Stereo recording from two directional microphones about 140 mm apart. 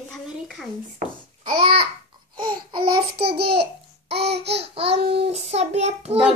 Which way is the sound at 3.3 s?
45° right (ahead or behind).